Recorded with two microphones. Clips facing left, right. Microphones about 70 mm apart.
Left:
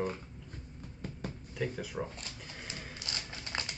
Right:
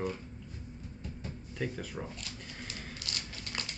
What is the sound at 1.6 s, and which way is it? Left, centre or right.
Speech, centre.